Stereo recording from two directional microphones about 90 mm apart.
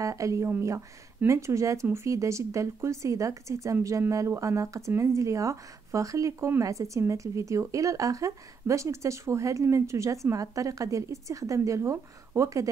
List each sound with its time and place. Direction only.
0.0 s a woman's voice: 35° right (ahead or behind)